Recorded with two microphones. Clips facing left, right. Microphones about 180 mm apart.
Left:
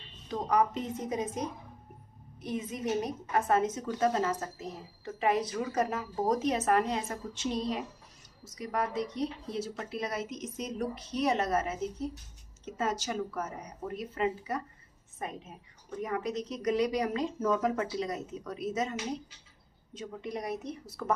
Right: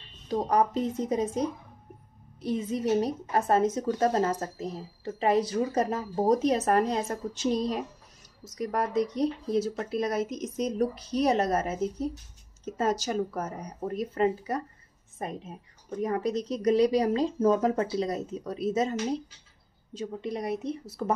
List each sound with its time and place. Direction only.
0.3 s a woman's voice: 35° right (ahead or behind)
2.4 s a woman's voice: 30° right (ahead or behind)